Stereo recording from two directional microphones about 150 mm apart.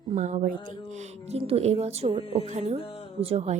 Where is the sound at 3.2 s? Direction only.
45° right (ahead or behind).